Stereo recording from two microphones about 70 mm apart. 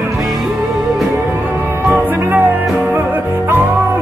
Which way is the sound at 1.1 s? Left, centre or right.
Right.